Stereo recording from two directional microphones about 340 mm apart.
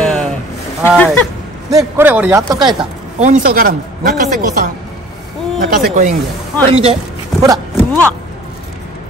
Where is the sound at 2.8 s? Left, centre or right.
Right.